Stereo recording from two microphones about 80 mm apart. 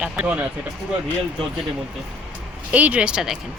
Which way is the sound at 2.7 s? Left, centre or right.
Centre.